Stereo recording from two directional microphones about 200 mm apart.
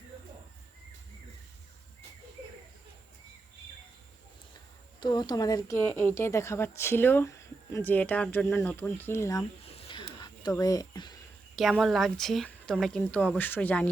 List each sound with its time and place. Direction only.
4.9 s a woman's voice: 20° left (ahead or behind)
9.6 s a sound: 30° left (ahead or behind)
10.6 s speech: 20° left (ahead or behind)
11.5 s a woman's voice: centre (ahead or behind)